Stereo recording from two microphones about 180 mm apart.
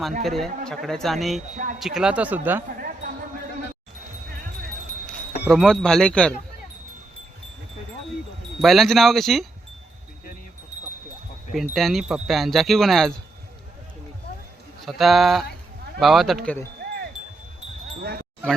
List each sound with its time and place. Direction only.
0.2 s speech: centre (ahead or behind)
5.5 s speech: centre (ahead or behind)
8.6 s speech: centre (ahead or behind)
11.5 s speech: centre (ahead or behind)
14.8 s speech: centre (ahead or behind)
18.0 s a sound: 60° right (ahead or behind)